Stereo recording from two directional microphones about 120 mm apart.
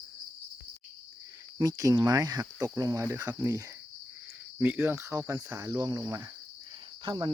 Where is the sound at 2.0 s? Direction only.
35° right (ahead or behind).